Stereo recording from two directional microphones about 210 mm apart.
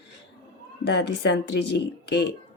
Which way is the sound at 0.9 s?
55° left (ahead or behind).